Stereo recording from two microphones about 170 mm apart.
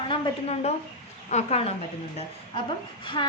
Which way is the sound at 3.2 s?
25° left (ahead or behind).